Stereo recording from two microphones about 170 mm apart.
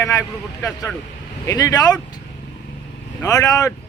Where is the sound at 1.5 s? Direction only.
20° left (ahead or behind).